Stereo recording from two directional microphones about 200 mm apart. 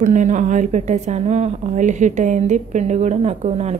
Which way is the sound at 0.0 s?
40° right (ahead or behind).